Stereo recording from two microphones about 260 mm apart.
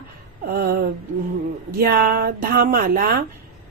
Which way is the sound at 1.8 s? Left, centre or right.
Right.